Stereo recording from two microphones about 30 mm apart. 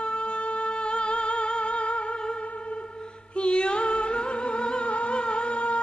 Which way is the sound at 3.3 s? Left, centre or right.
Left.